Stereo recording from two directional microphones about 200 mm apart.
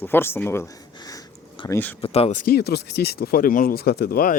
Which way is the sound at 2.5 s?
55° left (ahead or behind).